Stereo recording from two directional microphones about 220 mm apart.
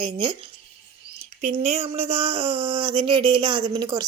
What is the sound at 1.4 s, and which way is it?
Speech, 30° right (ahead or behind).